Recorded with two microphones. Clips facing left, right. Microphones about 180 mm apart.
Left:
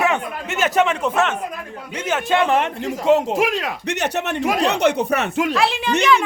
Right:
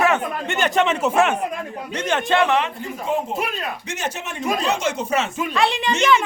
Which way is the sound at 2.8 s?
85° left.